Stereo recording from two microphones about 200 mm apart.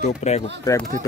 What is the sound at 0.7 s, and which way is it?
Speech, 20° left (ahead or behind).